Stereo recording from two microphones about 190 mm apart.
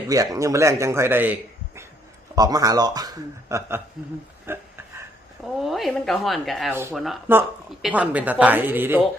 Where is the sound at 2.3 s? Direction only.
20° right (ahead or behind).